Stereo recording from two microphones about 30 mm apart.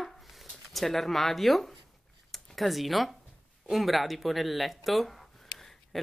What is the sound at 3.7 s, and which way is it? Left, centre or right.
Speech, centre.